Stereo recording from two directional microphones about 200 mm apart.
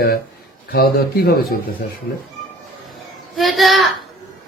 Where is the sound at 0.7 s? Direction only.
50° left (ahead or behind).